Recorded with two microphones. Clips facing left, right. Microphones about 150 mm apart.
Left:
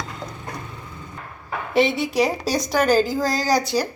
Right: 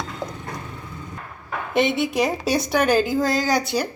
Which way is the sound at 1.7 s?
Centre (ahead or behind).